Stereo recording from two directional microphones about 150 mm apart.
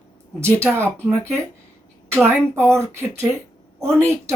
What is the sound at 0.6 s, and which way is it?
Speech, 15° right (ahead or behind).